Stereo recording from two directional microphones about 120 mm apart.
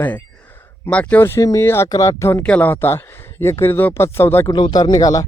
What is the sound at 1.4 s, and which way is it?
Speech, 25° left (ahead or behind).